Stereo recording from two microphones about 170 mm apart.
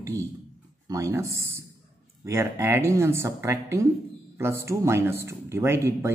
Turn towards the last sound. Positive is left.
turn(degrees=-15)  # may be behind; listen again after turning